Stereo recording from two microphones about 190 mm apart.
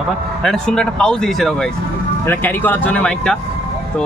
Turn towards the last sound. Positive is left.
turn(degrees=5)  # may be behind; listen again after turning